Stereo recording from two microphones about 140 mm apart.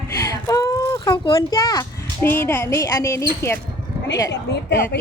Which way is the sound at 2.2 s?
15° left (ahead or behind).